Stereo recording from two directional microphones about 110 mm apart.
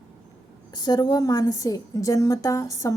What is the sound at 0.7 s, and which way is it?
A woman's voice, 40° left (ahead or behind).